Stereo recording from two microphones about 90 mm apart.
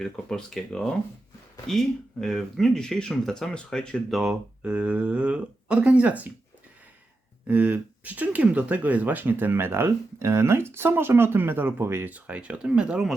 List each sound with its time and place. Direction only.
0.0 s speech: 5° left (ahead or behind)
4.2 s speech: 5° right (ahead or behind)
7.4 s speech: 15° right (ahead or behind)